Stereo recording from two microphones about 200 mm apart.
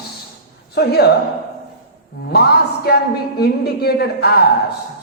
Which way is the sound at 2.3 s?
55° left (ahead or behind).